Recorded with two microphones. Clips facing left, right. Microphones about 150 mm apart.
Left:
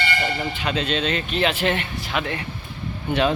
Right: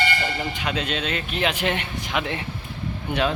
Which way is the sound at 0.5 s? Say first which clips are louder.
Left 3 dB; 10° right (ahead or behind).